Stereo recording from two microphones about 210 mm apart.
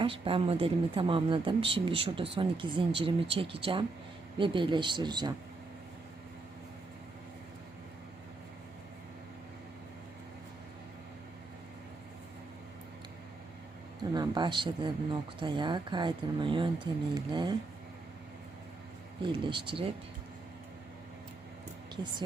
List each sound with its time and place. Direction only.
0.0 s speech: 25° right (ahead or behind)
14.0 s speech: 20° right (ahead or behind)
19.2 s speech: 25° right (ahead or behind)